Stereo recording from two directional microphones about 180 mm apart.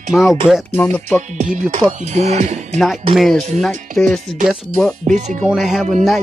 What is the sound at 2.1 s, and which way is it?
Speech, 40° right (ahead or behind).